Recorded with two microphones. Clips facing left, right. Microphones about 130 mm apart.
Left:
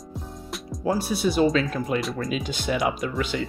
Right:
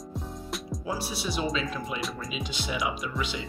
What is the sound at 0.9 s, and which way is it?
Speech, 50° left (ahead or behind).